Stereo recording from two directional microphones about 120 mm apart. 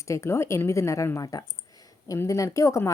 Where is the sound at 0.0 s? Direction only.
25° left (ahead or behind).